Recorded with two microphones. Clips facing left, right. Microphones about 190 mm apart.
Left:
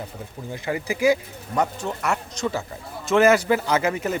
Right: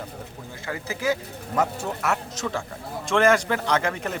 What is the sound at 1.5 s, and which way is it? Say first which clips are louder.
A man's voice: left 1 dB; centre (ahead or behind).